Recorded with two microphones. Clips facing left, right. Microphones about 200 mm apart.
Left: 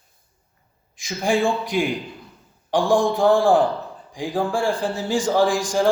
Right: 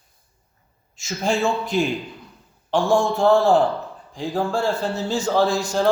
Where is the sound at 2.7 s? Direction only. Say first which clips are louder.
Left 1 dB; 15° left (ahead or behind).